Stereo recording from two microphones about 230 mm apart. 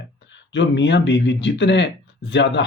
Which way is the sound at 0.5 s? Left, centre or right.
Left.